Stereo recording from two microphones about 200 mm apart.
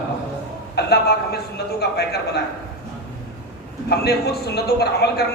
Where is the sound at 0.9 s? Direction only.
55° left (ahead or behind).